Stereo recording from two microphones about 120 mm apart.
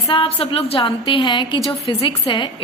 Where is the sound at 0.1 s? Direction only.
50° left (ahead or behind).